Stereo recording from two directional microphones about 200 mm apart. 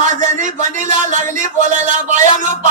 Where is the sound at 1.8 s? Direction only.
40° right (ahead or behind).